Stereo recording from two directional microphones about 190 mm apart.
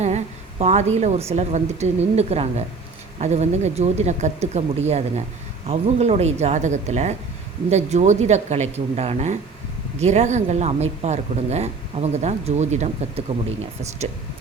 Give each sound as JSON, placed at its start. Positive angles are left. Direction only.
{"t": 0.6, "sound": "speech", "side_deg": -35}